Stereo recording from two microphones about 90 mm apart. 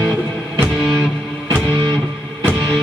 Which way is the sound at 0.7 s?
5° right (ahead or behind).